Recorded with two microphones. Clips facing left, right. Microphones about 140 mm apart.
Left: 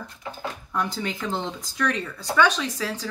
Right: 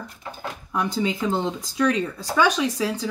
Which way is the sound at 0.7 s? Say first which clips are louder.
Right 5 dB; 15° right (ahead or behind).